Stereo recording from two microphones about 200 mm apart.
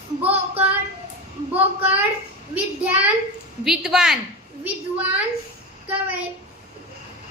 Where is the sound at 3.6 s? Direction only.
5° right (ahead or behind).